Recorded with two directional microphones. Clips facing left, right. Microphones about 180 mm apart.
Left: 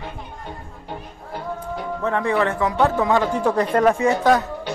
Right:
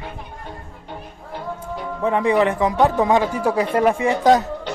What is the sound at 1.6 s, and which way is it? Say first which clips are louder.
Speech: right 2 dB; 15° right (ahead or behind).